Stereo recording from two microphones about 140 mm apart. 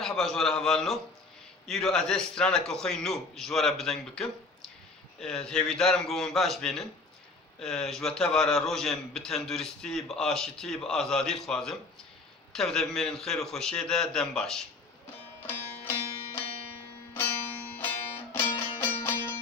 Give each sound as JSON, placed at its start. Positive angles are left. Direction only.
{"t": 0.0, "sound": "a man's voice", "side_deg": 0}
{"t": 15.4, "sound": "music", "side_deg": 15}
{"t": 17.7, "sound": "music", "side_deg": 15}